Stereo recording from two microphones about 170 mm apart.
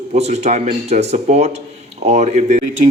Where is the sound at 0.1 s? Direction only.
40° right (ahead or behind).